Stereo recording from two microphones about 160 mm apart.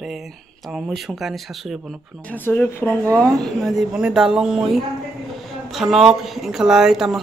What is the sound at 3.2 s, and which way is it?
Speech, centre (ahead or behind).